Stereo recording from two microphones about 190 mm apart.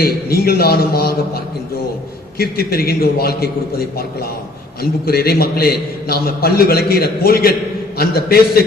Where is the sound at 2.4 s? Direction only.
55° left (ahead or behind).